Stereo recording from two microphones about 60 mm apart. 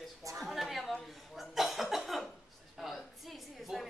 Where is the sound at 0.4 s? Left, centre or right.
Centre.